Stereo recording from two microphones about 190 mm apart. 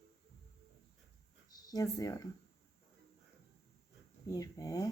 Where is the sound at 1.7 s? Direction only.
20° left (ahead or behind).